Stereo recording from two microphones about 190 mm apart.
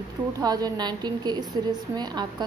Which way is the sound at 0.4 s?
20° right (ahead or behind).